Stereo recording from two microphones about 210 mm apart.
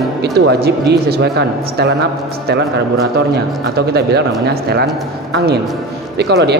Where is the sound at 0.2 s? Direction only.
50° right (ahead or behind).